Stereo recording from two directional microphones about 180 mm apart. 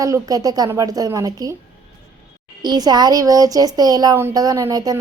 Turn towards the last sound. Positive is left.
turn(degrees=-20)  # may be behind; listen again after turning